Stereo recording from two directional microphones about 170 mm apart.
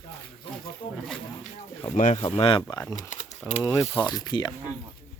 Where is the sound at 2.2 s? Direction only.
35° left (ahead or behind).